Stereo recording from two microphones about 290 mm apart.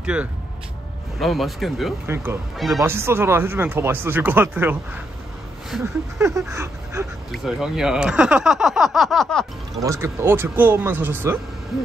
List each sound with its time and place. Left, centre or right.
0.0 s speech: centre
9.8 s speech: centre